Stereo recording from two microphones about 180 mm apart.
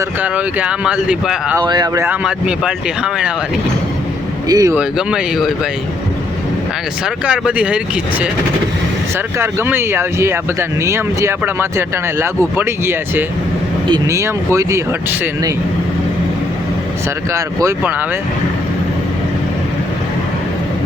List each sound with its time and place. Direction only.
0.2 s speech: 5° right (ahead or behind)
1.6 s speech: 20° right (ahead or behind)
2.0 s speech: 5° right (ahead or behind)
4.4 s speech: 20° right (ahead or behind)
4.7 s speech: 5° right (ahead or behind)
7.3 s speech: 5° right (ahead or behind)
9.4 s speech: 15° right (ahead or behind)
17.3 s speech: 15° right (ahead or behind)